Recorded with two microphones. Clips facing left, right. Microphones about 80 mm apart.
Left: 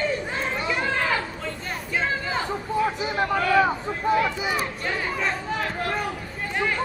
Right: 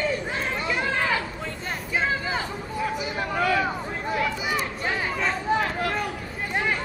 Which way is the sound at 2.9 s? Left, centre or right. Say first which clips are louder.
Left 3 dB; left.